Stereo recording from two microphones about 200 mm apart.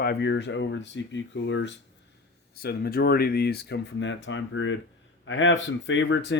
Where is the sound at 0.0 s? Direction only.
55° left (ahead or behind).